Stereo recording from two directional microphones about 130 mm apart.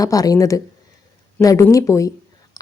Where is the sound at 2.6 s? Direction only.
30° left (ahead or behind).